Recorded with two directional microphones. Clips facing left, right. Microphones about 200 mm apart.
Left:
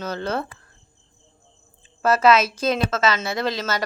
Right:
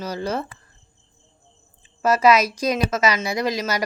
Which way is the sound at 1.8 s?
10° right (ahead or behind).